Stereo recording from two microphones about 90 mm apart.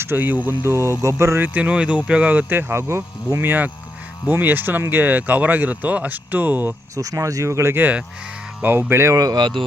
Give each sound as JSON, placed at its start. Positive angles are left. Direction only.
{"t": 0.0, "sound": "speech", "side_deg": -25}
{"t": 0.6, "sound": "speech", "side_deg": -30}
{"t": 1.5, "sound": "speech", "side_deg": -15}
{"t": 3.4, "sound": "speech", "side_deg": -20}
{"t": 6.9, "sound": "speech", "side_deg": -40}
{"t": 9.1, "sound": "speech", "side_deg": -45}